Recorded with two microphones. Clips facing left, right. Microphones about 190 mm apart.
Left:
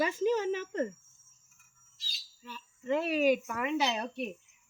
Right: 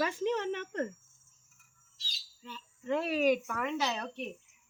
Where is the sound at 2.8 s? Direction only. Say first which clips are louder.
Left 1 dB; centre (ahead or behind).